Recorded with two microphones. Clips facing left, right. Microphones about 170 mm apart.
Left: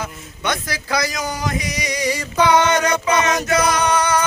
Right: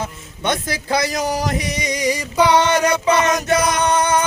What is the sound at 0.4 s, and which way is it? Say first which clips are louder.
Speech: right 3 dB; 25° right (ahead or behind).